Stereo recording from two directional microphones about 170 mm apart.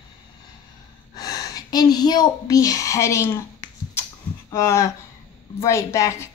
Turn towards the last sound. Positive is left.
turn(degrees=15)  # may be behind; listen again after turning